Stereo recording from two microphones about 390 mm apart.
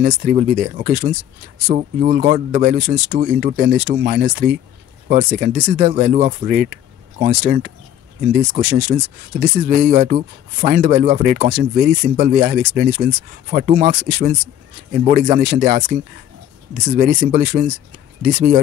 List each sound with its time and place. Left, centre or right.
0.0 s speech: right